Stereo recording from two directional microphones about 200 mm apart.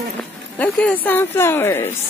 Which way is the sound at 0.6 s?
5° left (ahead or behind).